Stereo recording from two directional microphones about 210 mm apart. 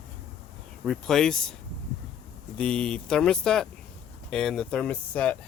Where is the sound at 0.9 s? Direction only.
Centre (ahead or behind).